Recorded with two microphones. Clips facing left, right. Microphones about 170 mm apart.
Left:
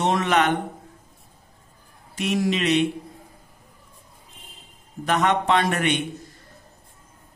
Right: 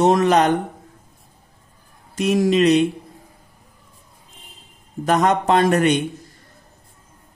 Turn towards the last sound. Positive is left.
turn(degrees=-40)  # may be behind; listen again after turning